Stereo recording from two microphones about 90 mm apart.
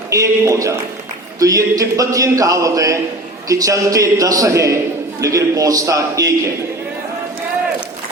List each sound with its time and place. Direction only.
0.1 s a man's voice: 35° right (ahead or behind)